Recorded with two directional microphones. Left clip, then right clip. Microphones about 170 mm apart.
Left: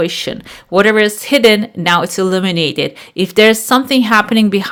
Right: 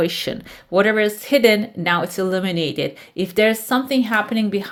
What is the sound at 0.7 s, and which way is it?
Speech, 25° left (ahead or behind).